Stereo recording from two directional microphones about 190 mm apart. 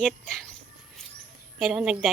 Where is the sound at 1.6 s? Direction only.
5° right (ahead or behind).